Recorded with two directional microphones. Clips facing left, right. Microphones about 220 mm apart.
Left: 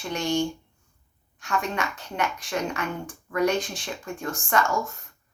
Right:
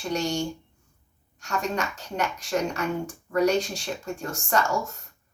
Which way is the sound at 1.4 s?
40° right (ahead or behind).